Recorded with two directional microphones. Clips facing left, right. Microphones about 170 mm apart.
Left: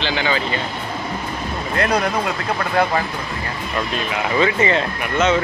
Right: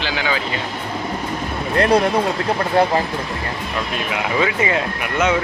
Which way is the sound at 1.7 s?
30° right (ahead or behind).